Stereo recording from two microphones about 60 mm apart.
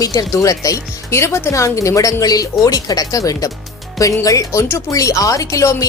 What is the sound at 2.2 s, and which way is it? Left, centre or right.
Speech, left.